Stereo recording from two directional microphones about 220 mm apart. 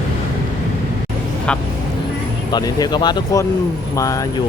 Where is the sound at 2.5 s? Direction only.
15° left (ahead or behind).